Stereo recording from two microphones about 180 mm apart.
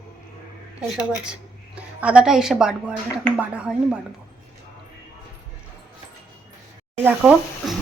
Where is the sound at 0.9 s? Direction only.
5° right (ahead or behind).